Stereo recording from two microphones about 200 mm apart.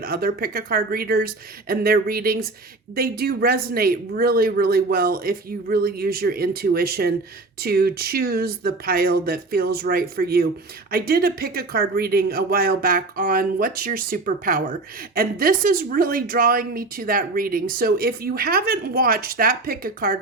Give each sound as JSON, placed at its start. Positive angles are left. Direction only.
{"t": 0.0, "sound": "speech", "side_deg": -50}